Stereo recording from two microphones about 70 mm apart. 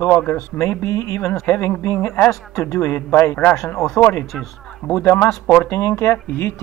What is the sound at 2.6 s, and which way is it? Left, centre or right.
Speech, left.